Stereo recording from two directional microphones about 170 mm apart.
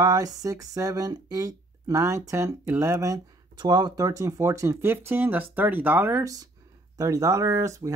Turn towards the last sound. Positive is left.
turn(degrees=-20)  # may be behind; listen again after turning